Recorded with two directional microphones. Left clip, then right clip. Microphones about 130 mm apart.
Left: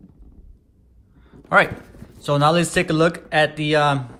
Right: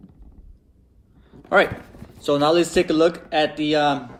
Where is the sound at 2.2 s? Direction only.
40° left (ahead or behind).